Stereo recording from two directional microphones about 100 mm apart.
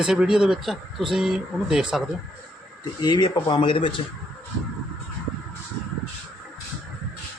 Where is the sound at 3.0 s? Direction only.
50° left (ahead or behind).